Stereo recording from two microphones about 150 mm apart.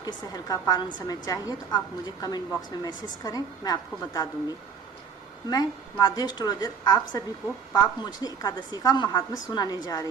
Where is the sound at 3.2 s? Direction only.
25° left (ahead or behind).